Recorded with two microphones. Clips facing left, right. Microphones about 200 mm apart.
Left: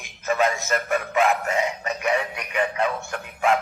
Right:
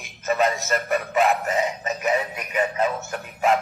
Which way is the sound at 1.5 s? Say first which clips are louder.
Right 1 dB; centre (ahead or behind).